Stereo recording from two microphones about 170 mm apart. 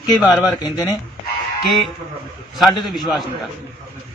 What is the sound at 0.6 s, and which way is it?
Speech, 20° left (ahead or behind).